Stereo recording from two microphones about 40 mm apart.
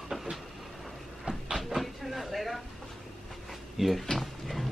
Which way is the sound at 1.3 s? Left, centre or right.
Right.